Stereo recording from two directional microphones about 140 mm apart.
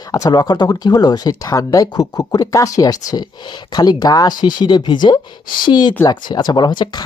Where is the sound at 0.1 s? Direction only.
25° left (ahead or behind).